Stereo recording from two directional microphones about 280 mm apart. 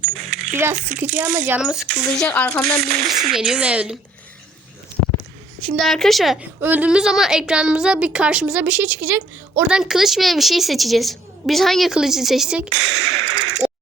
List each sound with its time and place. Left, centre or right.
0.5 s a woman's voice: centre
2.9 s speech: right
3.3 s a woman's voice: centre
5.6 s a woman's voice: centre
12.9 s whip: right